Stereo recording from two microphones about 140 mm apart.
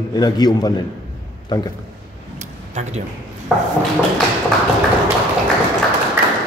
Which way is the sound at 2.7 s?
55° right (ahead or behind).